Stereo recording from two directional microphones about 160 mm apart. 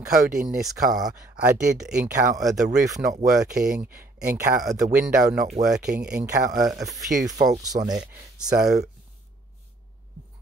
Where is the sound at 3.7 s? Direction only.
10° right (ahead or behind).